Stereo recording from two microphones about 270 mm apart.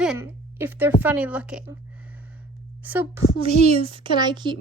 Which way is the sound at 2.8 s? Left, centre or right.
Centre.